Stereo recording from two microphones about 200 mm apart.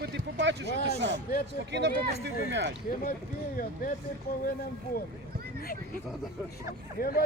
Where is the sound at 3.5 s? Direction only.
45° left (ahead or behind).